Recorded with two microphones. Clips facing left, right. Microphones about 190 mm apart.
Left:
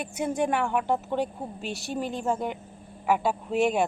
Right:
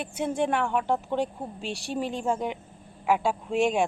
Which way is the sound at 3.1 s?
5° left (ahead or behind).